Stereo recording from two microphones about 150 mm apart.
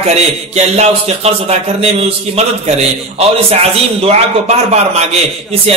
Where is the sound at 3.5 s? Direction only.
40° right (ahead or behind).